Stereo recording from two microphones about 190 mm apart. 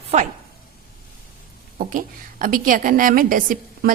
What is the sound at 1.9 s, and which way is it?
A woman's voice, 45° right (ahead or behind).